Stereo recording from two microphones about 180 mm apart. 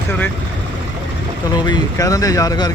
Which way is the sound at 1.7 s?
20° left (ahead or behind).